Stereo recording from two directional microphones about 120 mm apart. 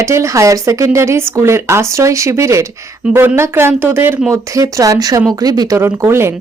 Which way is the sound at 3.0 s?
10° right (ahead or behind).